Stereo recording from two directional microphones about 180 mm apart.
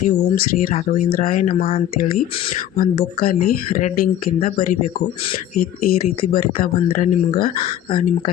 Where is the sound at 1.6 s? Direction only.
30° left (ahead or behind).